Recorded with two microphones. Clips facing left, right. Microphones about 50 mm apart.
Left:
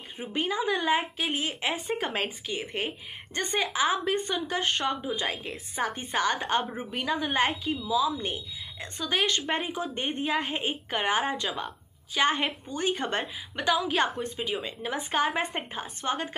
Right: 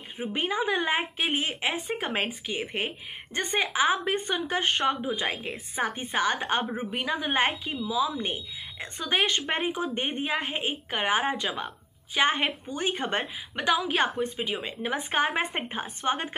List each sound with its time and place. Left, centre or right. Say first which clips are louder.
0.2 s speech: right 1 dB; centre
1.6 s a woman's voice: even; centre
14.6 s a woman's voice: right 2 dB; centre